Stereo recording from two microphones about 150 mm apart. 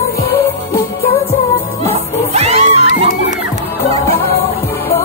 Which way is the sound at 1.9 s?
45° right (ahead or behind).